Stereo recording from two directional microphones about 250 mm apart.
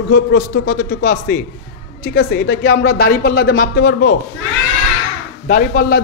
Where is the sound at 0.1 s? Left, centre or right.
Left.